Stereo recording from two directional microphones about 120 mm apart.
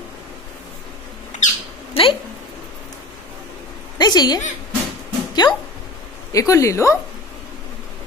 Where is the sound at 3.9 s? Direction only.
35° left (ahead or behind).